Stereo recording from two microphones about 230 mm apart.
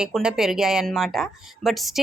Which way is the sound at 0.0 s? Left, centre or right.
Centre.